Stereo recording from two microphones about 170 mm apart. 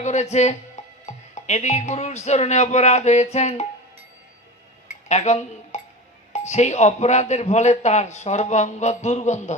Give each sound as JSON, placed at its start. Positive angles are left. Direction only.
{"t": 0.0, "sound": "speech", "side_deg": 45}
{"t": 4.9, "sound": "dishes", "side_deg": 45}
{"t": 6.3, "sound": "speech", "side_deg": 40}